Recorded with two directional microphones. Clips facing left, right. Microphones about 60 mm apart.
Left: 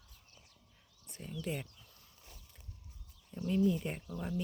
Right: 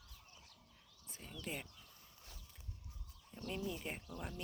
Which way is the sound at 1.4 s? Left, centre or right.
Centre.